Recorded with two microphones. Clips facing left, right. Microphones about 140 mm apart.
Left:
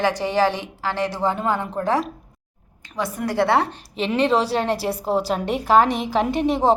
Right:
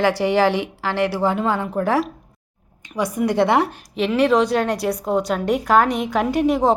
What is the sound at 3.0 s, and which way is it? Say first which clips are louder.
Speech: right 3 dB; 15° right (ahead or behind).